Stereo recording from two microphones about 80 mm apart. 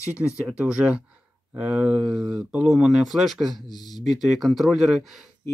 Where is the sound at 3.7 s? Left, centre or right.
Left.